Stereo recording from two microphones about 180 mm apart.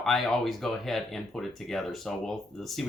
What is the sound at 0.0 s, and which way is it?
Speech, centre (ahead or behind).